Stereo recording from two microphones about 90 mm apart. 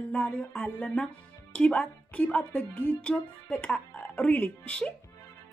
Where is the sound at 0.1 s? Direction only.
15° left (ahead or behind).